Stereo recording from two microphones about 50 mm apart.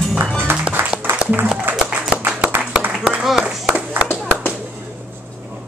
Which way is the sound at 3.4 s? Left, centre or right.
Right.